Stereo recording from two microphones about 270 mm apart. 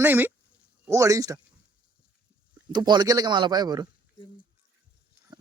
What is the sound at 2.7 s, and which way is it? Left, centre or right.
Speech, centre.